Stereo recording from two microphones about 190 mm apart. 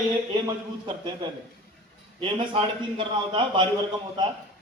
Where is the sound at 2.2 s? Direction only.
25° right (ahead or behind).